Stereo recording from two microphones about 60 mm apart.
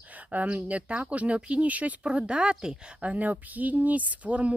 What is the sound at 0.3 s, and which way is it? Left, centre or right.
Speech, right.